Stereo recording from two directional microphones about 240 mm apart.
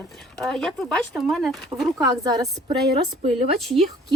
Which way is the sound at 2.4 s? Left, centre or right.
Centre.